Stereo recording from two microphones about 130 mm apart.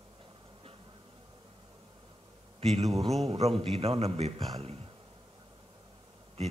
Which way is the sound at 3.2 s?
50° right (ahead or behind).